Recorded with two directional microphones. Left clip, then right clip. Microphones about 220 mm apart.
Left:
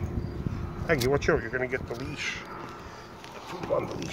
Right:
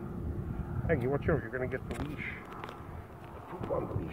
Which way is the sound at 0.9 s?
20° left (ahead or behind).